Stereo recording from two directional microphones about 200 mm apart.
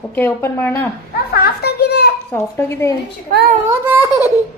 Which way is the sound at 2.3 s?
10° left (ahead or behind).